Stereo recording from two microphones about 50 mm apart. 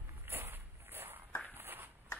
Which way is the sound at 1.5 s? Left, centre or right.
Right.